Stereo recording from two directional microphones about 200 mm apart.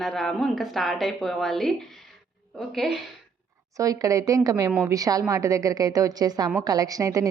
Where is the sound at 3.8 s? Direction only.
15° right (ahead or behind).